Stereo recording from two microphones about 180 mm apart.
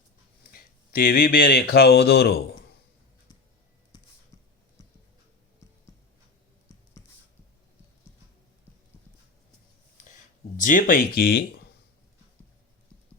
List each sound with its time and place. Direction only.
0.5 s speech: 55° left (ahead or behind)
10.6 s speech: 50° left (ahead or behind)